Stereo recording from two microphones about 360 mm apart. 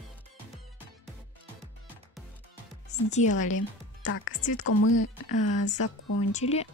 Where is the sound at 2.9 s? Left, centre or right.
Centre.